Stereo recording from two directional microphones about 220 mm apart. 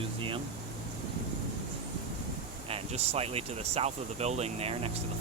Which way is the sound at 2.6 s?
25° right (ahead or behind).